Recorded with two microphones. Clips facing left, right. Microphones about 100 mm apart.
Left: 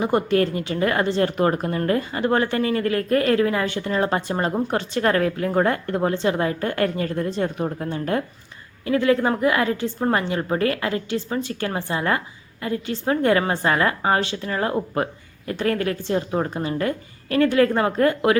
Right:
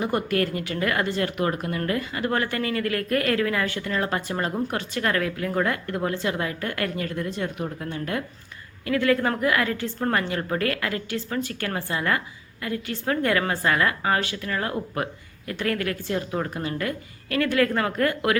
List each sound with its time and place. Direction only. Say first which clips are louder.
0.0 s speech: left 5 dB; 25° left (ahead or behind)